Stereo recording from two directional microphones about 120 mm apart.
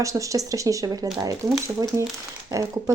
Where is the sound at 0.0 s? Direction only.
25° right (ahead or behind).